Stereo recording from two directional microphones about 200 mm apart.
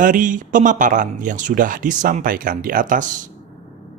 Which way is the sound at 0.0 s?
40° right (ahead or behind).